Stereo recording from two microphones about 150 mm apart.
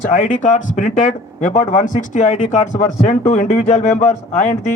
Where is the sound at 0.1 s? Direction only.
60° left (ahead or behind).